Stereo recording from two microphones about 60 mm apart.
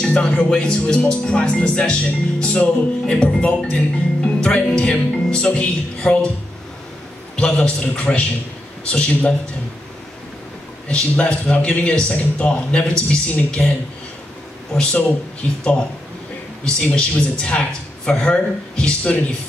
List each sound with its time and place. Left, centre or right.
0.0 s speech: centre
7.3 s a man's voice: centre
10.9 s a man's voice: centre
13.6 s speech: centre
14.8 s a man's voice: centre
16.6 s speech: centre